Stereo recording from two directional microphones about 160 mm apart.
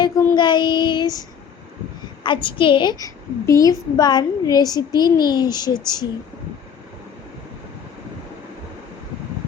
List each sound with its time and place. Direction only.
0.3 s a woman's voice: 30° left (ahead or behind)
2.2 s a woman's voice: 30° left (ahead or behind)